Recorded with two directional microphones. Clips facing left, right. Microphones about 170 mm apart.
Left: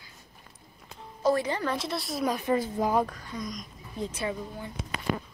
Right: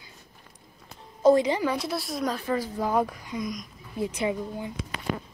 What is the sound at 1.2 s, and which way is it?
Speech, 15° right (ahead or behind).